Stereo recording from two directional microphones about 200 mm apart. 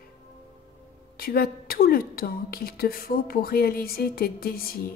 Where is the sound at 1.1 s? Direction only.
50° left (ahead or behind).